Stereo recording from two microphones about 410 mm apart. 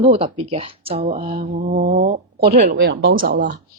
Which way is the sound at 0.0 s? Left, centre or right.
Centre.